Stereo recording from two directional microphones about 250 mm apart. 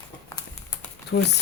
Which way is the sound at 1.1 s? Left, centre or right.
Left.